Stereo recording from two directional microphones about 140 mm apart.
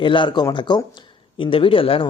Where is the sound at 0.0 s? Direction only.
35° left (ahead or behind).